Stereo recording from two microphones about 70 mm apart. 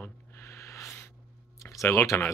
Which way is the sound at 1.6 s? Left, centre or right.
Left.